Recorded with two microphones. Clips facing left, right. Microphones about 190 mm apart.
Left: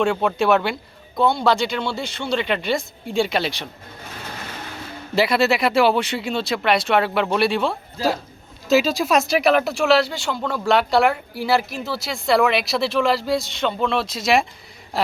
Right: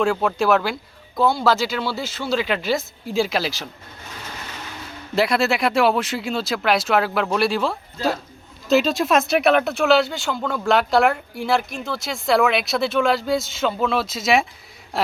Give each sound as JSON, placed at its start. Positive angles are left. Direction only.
{"t": 0.0, "sound": "speech", "side_deg": 0}
{"t": 5.1, "sound": "speech", "side_deg": 0}